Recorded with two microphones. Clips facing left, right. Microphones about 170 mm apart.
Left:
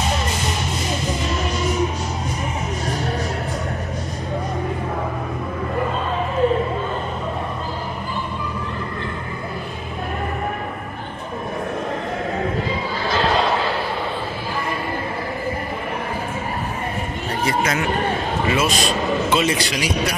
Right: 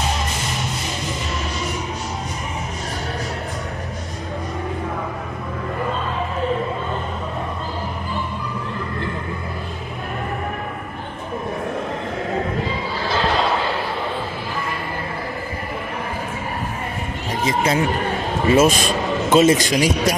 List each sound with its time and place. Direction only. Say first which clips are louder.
17.5 s speech: right 3 dB; 30° right (ahead or behind)
18.5 s a man's voice: right 7 dB; 45° right (ahead or behind)